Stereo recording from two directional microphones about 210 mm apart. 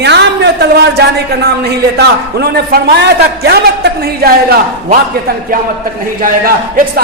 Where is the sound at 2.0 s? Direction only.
45° right (ahead or behind).